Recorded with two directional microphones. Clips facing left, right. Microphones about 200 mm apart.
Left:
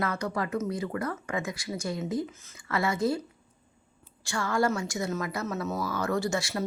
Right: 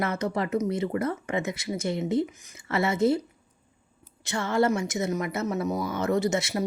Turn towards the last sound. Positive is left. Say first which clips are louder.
# right 4 dB
turn(degrees=-20)  # may be behind; listen again after turning